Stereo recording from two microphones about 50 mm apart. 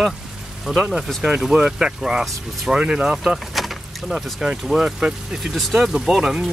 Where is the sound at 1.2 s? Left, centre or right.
Centre.